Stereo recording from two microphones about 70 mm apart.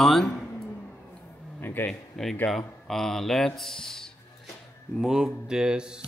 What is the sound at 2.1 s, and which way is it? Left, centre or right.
Speech, centre.